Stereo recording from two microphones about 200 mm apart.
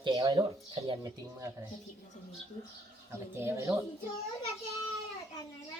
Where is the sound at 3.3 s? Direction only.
10° right (ahead or behind).